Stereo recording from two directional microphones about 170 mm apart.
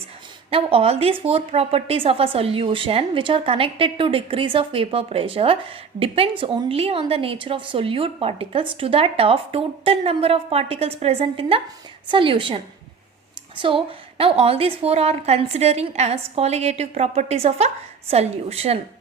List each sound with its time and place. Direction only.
0.5 s a woman's voice: 35° right (ahead or behind)